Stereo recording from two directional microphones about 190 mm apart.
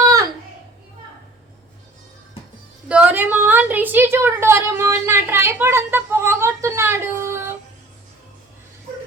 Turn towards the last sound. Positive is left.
turn(degrees=-15)  # may be behind; listen again after turning